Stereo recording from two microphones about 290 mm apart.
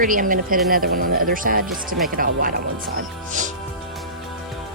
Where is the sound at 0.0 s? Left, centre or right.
Right.